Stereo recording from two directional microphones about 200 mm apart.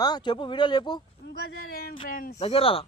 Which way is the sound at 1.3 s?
50° left (ahead or behind).